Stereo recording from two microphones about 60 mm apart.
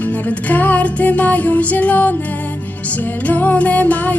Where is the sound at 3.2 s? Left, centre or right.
Left.